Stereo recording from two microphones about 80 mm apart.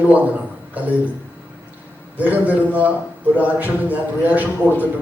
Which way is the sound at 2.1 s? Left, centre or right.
Centre.